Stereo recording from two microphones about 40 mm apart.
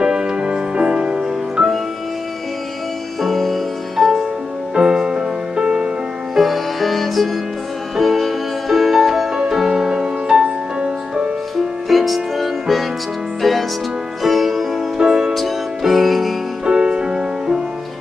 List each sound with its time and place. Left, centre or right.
0.0 s music: centre
3.2 s music: centre
4.7 s music: centre
6.3 s music: centre; by 11.3 s right
11.9 s music: centre
15.0 s music: centre
15.3 s music: centre
16.6 s music: right